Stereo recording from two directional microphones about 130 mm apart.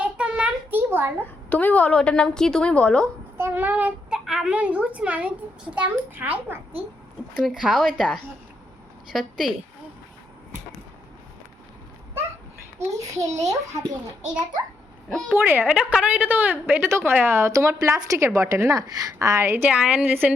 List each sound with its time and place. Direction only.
0.0 s a sound: 10° right (ahead or behind)
1.2 s a woman's voice: 10° left (ahead or behind)
3.3 s a child's voice: 20° right (ahead or behind)
12.8 s a woman's voice: 25° right (ahead or behind)
15.3 s a woman's voice: 15° right (ahead or behind)